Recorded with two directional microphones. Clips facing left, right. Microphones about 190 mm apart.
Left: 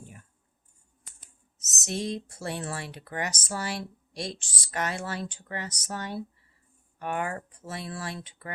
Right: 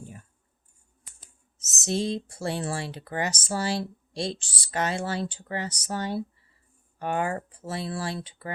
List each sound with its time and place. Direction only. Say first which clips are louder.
1.2 s speech: right 1 dB; 30° right (ahead or behind)